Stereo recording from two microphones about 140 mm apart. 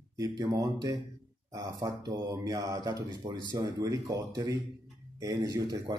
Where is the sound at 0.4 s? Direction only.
25° right (ahead or behind).